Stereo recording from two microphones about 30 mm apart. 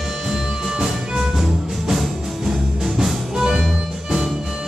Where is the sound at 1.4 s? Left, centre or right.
Centre.